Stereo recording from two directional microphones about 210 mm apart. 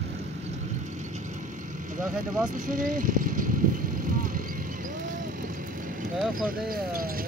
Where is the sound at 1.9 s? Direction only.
40° right (ahead or behind).